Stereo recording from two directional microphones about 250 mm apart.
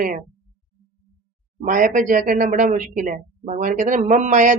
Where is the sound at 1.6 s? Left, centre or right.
Right.